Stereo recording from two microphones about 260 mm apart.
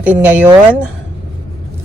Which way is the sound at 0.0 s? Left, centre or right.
Centre.